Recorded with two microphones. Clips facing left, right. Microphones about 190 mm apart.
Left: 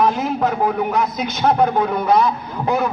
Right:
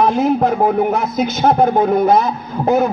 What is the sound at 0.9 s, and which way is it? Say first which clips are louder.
A man's voice: right 3 dB; 45° right (ahead or behind).